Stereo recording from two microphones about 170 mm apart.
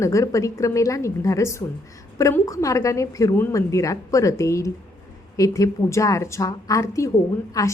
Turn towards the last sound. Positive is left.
turn(degrees=20)  # may be behind; listen again after turning